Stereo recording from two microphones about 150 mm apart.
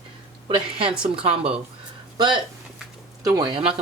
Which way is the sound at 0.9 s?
5° right (ahead or behind).